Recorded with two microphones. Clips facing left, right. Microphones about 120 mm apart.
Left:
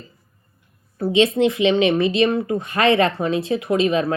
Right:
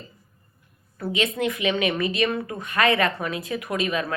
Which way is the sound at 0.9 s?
30° left (ahead or behind).